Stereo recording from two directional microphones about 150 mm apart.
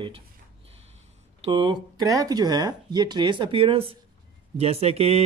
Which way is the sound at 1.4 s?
35° right (ahead or behind).